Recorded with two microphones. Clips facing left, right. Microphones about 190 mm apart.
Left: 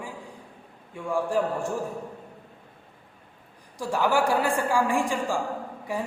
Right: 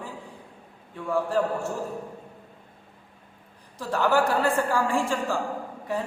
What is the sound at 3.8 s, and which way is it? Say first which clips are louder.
A man's voice: right 1 dB; 10° left (ahead or behind).